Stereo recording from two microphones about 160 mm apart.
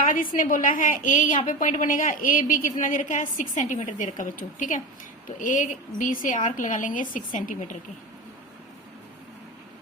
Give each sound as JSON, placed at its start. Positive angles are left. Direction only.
{"t": 0.0, "sound": "a woman's voice", "side_deg": 60}